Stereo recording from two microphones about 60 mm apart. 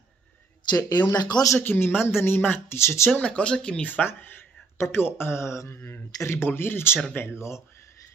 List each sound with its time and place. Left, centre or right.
0.7 s speech: left
1.6 s speech: left
3.2 s speech: centre
4.0 s speech: left
4.9 s mantra: left
6.2 s speech: left
7.2 s mantra: left